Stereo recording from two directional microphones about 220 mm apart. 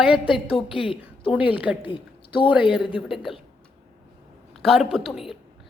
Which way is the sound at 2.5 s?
5° right (ahead or behind).